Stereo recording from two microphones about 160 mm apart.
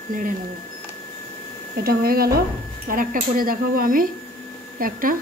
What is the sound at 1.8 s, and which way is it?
Speech, 70° right (ahead or behind).